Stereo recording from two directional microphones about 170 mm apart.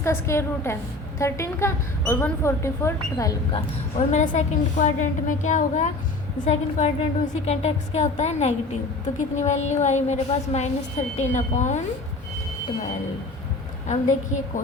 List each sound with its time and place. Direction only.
0.0 s a woman's voice: 15° left (ahead or behind)
3.9 s a woman's voice: 45° left (ahead or behind)
13.8 s a woman's voice: 45° left (ahead or behind)